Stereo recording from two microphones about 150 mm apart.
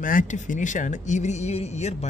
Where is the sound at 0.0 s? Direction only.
60° left (ahead or behind).